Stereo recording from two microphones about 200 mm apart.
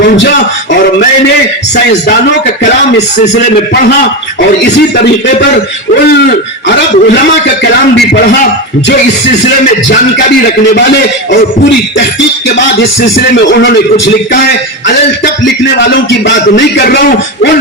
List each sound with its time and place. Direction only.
6.7 s a man's voice: 55° left (ahead or behind)
13.3 s a man's voice: 65° left (ahead or behind)
15.8 s a man's voice: 60° left (ahead or behind)